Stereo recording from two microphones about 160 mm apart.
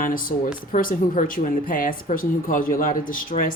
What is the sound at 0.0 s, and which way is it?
Speech, 60° left (ahead or behind).